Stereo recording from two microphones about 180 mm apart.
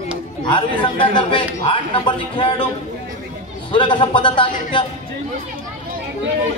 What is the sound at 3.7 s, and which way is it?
Speech, 25° left (ahead or behind).